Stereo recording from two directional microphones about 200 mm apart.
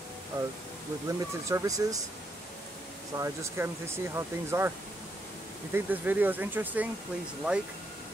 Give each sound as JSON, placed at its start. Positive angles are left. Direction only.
{"t": 1.0, "sound": "speech", "side_deg": -15}
{"t": 3.2, "sound": "speech", "side_deg": -10}